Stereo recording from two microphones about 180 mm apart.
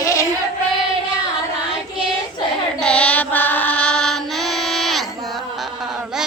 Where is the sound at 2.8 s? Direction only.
5° left (ahead or behind).